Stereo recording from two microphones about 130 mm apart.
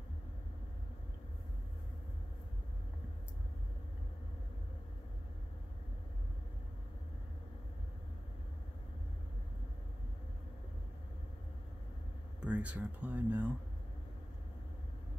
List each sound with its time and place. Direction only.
12.4 s speech: 10° right (ahead or behind)